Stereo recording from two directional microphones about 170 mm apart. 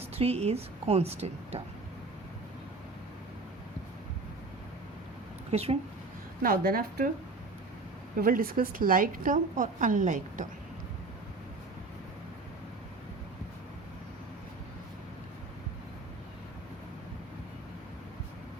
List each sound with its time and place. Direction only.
0.0 s a woman's voice: 35° right (ahead or behind)
5.5 s speech: 35° right (ahead or behind)
6.4 s a woman's voice: 60° right (ahead or behind)
8.2 s a woman's voice: 60° right (ahead or behind)